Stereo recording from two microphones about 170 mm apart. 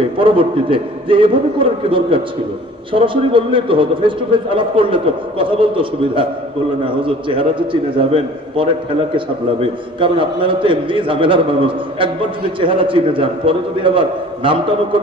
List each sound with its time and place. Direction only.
0.2 s a man's voice: 30° right (ahead or behind)